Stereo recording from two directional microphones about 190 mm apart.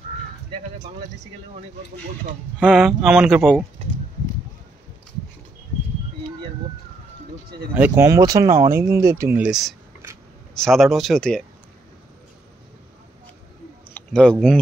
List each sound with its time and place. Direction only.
2.6 s speech: centre (ahead or behind)
3.8 s speech: 30° right (ahead or behind)
7.7 s speech: 10° right (ahead or behind)
13.9 s speech: 5° left (ahead or behind)